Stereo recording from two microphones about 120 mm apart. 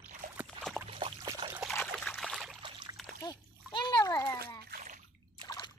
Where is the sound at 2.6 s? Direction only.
40° right (ahead or behind).